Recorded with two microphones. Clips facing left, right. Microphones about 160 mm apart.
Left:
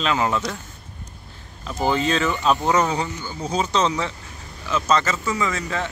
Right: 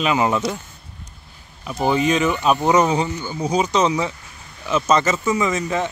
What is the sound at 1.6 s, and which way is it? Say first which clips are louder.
Speech: right 3 dB; 15° right (ahead or behind).